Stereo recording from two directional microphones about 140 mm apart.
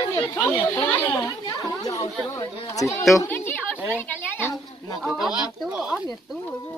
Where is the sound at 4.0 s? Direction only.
15° left (ahead or behind).